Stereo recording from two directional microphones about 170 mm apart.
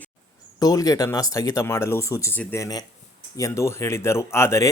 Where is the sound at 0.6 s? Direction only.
20° left (ahead or behind).